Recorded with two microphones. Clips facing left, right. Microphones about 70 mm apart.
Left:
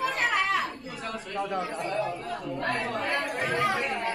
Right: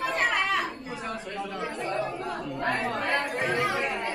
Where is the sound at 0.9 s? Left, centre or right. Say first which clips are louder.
Right 1 dB; centre.